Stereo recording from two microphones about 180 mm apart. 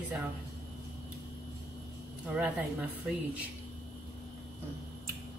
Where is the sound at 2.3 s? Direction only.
5° right (ahead or behind).